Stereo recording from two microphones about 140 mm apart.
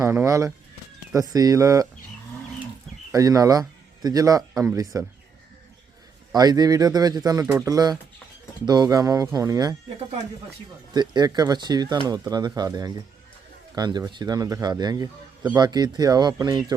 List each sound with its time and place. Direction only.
0.1 s speech: 20° right (ahead or behind)
3.1 s a man's voice: 25° right (ahead or behind)
6.3 s speech: 25° right (ahead or behind)
10.9 s speech: 30° right (ahead or behind)